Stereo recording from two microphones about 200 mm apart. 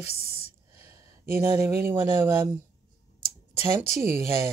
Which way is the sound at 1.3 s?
10° right (ahead or behind).